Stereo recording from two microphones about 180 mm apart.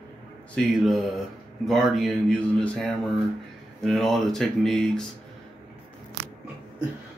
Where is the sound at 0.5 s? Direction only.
Centre (ahead or behind).